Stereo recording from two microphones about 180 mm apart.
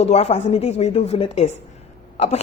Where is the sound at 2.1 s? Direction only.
40° left (ahead or behind).